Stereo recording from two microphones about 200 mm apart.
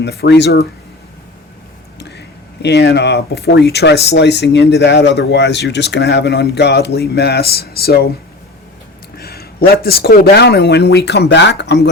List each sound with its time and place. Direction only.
0.0 s speech: 55° left (ahead or behind)
2.0 s speech: 55° left (ahead or behind)
9.1 s speech: 50° left (ahead or behind)